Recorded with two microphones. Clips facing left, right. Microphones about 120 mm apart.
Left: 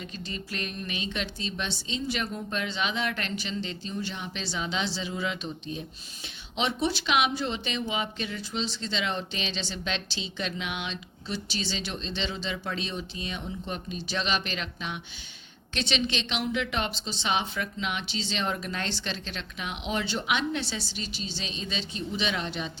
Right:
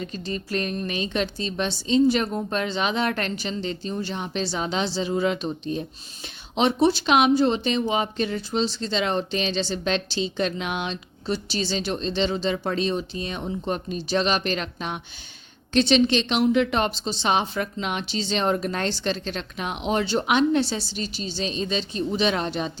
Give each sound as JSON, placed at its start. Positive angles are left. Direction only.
{"t": 0.0, "sound": "speech", "side_deg": -40}
{"t": 6.6, "sound": "speech", "side_deg": -40}